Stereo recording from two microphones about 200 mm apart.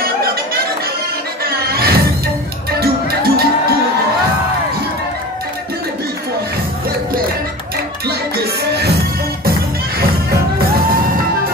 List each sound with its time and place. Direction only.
1.4 s music: 50° right (ahead or behind)
8.4 s music: 55° right (ahead or behind)